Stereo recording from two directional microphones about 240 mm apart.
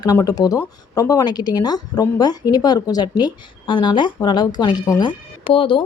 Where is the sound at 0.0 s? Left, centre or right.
Centre.